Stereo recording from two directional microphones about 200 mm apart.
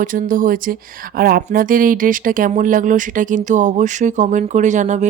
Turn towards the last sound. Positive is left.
turn(degrees=-35)  # may be behind; listen again after turning